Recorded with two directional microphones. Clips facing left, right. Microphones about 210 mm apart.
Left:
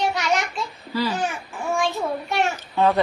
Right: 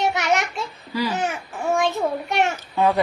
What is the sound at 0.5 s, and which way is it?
Speech, 20° right (ahead or behind).